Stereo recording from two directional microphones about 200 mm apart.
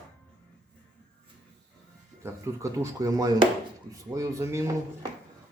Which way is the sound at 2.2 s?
15° right (ahead or behind).